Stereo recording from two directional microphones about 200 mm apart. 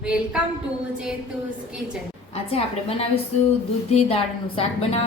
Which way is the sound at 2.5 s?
30° left (ahead or behind).